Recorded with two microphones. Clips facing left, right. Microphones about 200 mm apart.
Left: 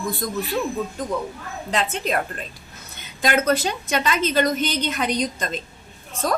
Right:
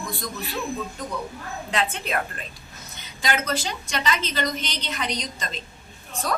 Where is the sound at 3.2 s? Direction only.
55° left (ahead or behind).